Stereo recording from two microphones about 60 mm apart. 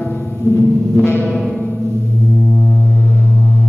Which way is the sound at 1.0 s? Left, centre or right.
Left.